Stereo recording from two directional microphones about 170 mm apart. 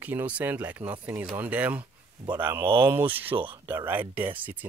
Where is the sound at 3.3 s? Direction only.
30° right (ahead or behind).